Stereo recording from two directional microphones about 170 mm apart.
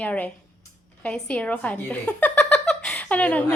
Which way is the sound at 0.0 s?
10° left (ahead or behind).